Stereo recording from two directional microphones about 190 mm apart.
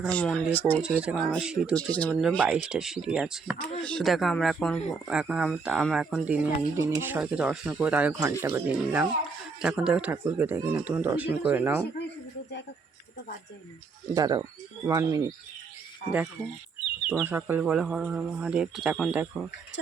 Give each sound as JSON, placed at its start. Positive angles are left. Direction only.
{"t": 0.0, "sound": "speech", "side_deg": 5}
{"t": 0.8, "sound": "speech", "side_deg": -5}
{"t": 1.7, "sound": "speech", "side_deg": 5}
{"t": 2.5, "sound": "speech", "side_deg": -5}
{"t": 14.1, "sound": "speech", "side_deg": -20}
{"t": 17.1, "sound": "speech", "side_deg": -10}